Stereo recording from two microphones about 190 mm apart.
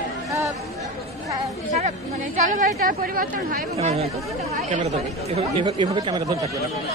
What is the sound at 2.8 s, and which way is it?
Speech, 50° right (ahead or behind).